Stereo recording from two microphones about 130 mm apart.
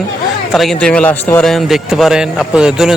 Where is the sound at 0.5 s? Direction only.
Centre (ahead or behind).